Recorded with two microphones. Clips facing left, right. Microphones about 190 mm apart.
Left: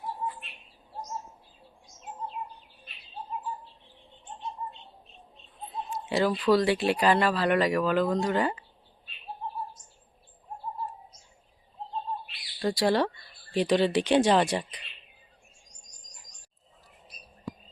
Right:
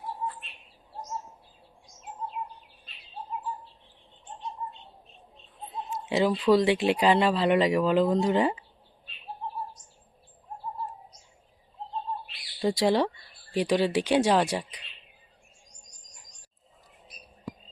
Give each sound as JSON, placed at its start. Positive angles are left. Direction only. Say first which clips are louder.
{"t": 6.1, "sound": "speech", "louder": "right 2 dB", "side_deg": -20}
{"t": 12.7, "sound": "speech", "louder": "even", "side_deg": -20}